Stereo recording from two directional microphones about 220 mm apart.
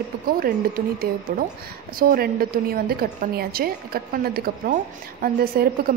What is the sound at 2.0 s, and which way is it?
Speech, 45° right (ahead or behind).